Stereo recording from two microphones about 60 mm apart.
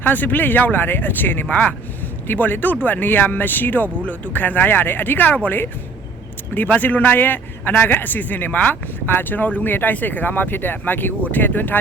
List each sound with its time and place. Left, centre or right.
0.0 s a man's voice: left